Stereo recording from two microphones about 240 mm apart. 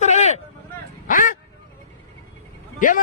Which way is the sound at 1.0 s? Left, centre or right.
Left.